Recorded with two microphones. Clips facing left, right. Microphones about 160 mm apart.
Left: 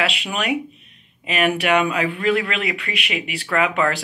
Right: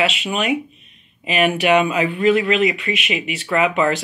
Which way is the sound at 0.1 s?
Centre (ahead or behind).